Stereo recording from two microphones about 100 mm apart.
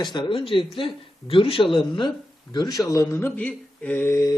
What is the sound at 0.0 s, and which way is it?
A man's voice, 50° left (ahead or behind).